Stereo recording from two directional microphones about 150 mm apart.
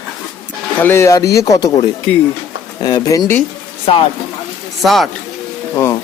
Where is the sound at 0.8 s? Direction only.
15° left (ahead or behind).